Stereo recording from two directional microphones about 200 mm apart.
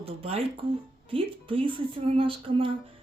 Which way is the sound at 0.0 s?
30° right (ahead or behind).